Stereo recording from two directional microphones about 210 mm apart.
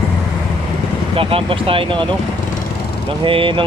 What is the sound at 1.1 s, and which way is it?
Speech, 25° right (ahead or behind).